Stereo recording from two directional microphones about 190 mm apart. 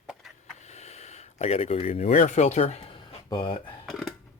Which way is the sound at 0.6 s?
35° left (ahead or behind).